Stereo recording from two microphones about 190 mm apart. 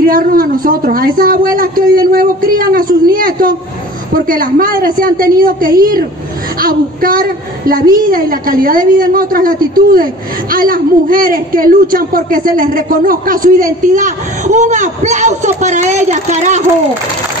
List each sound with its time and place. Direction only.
0.0 s a woman's voice: 50° right (ahead or behind)